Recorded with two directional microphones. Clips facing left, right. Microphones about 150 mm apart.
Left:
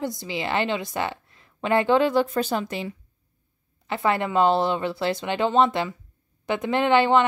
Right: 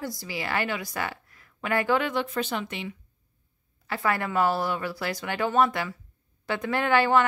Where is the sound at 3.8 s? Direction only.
20° left (ahead or behind).